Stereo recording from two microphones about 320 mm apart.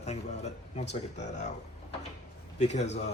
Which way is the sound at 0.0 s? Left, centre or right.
Left.